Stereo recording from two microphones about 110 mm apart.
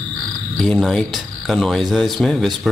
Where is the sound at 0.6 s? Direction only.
5° left (ahead or behind).